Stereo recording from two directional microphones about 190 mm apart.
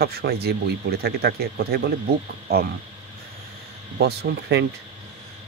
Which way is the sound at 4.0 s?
55° right (ahead or behind).